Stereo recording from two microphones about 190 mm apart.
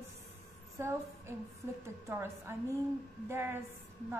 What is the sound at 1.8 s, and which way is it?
A woman's voice, 10° right (ahead or behind).